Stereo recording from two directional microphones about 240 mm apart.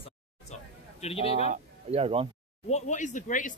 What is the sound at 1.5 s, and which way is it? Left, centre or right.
Speech, right.